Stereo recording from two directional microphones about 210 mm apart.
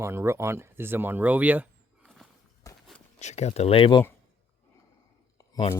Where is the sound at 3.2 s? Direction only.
35° left (ahead or behind).